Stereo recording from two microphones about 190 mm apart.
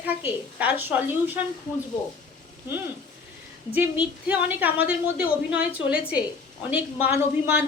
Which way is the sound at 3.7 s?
10° right (ahead or behind).